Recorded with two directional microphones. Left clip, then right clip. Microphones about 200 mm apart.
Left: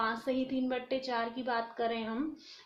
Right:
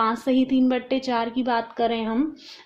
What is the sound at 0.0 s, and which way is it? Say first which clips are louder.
Speech: right 11 dB; 45° right (ahead or behind).